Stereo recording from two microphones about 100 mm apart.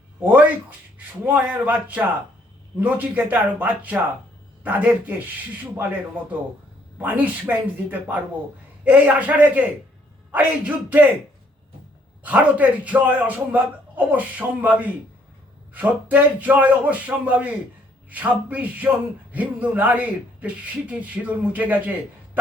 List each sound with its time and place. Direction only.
0.2 s a man's voice: 15° right (ahead or behind)
7.0 s a man's voice: 15° right (ahead or behind)
12.2 s a man's voice: 15° right (ahead or behind)